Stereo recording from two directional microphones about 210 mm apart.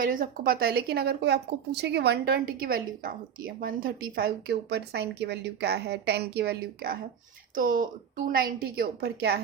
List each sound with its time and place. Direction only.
0.0 s speech: 40° right (ahead or behind)